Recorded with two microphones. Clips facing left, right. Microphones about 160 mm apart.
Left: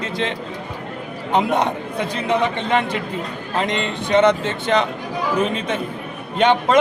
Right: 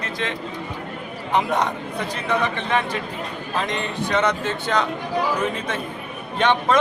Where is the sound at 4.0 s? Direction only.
20° left (ahead or behind).